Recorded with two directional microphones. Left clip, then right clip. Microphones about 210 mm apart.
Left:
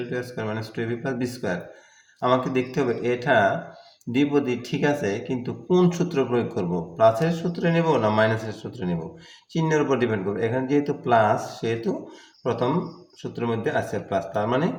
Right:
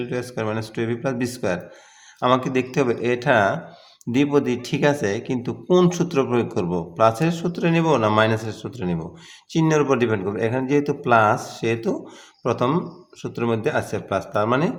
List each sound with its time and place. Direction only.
0.1 s a man's voice: 45° right (ahead or behind)